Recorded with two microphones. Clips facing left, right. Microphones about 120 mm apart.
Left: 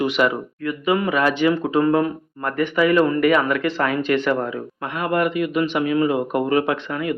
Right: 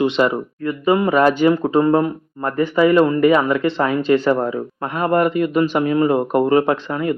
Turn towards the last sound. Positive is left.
turn(degrees=-35)  # may be behind; listen again after turning